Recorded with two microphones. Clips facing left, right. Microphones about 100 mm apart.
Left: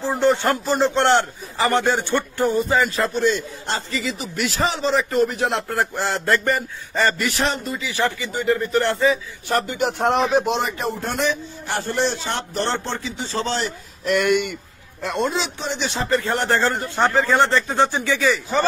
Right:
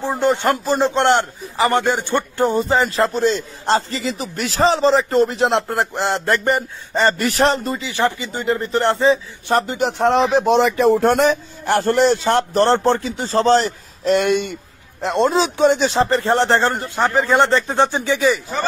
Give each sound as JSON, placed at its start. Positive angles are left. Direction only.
{"t": 0.0, "sound": "a man's voice", "side_deg": -15}
{"t": 2.7, "sound": "a man's voice", "side_deg": -30}
{"t": 7.2, "sound": "a man's voice", "side_deg": -40}
{"t": 7.8, "sound": "speech", "side_deg": -20}
{"t": 10.6, "sound": "speech", "side_deg": -90}
{"t": 11.1, "sound": "a man's voice", "side_deg": -45}
{"t": 15.5, "sound": "speech", "side_deg": -55}
{"t": 15.8, "sound": "speech", "side_deg": -35}